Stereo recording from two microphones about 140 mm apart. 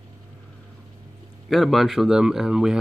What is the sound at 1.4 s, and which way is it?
Speech, centre (ahead or behind).